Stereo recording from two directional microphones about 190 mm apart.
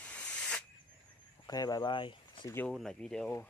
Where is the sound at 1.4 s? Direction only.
20° left (ahead or behind).